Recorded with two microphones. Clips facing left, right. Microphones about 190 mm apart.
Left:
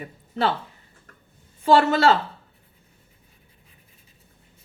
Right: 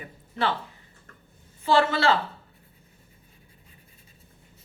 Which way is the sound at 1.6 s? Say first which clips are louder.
Left 4 dB; 45° left (ahead or behind).